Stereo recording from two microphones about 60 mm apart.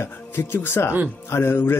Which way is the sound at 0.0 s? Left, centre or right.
Left.